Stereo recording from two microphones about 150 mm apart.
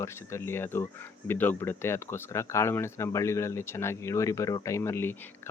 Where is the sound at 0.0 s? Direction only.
20° left (ahead or behind).